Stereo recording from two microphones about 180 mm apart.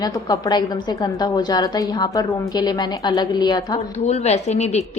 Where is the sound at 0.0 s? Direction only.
20° left (ahead or behind).